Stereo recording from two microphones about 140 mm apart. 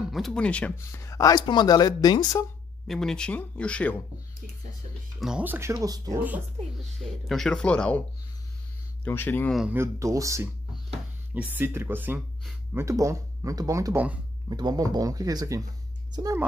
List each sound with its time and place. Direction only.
0.1 s speech: 5° left (ahead or behind); by 2.4 s 30° left (ahead or behind)
2.9 s speech: 5° left (ahead or behind)
5.2 s speech: 10° right (ahead or behind)
7.0 s speech: centre (ahead or behind)
9.0 s speech: 15° left (ahead or behind)
9.7 s speech: 20° right (ahead or behind)